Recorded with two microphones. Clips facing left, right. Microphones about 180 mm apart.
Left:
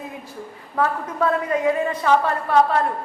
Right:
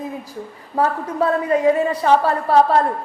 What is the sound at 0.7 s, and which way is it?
A woman's voice, 35° right (ahead or behind).